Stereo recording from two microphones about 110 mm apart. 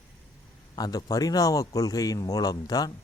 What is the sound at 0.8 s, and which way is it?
Speech, 35° left (ahead or behind).